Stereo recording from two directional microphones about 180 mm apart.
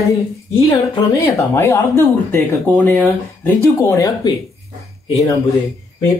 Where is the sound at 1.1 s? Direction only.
15° left (ahead or behind).